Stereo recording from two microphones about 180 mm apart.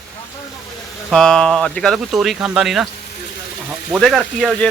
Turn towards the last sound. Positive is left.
turn(degrees=0)  # may be behind; listen again after turning